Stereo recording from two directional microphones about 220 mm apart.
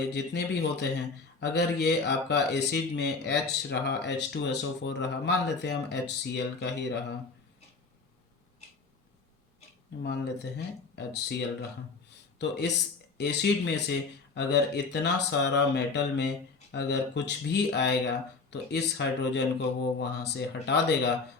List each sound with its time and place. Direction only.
0.1 s speech: 50° left (ahead or behind)
10.0 s speech: 50° left (ahead or behind)